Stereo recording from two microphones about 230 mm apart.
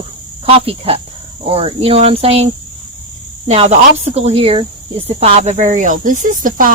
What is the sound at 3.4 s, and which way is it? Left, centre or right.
Speech, right.